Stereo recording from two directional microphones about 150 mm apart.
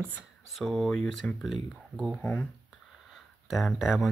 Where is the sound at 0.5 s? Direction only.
Centre (ahead or behind).